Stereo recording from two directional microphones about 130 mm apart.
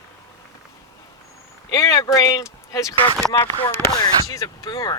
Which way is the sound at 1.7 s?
25° left (ahead or behind).